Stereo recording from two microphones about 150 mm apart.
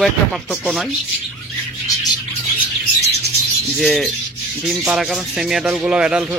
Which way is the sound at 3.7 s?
Centre (ahead or behind).